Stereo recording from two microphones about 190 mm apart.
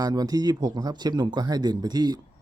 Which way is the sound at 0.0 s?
20° right (ahead or behind).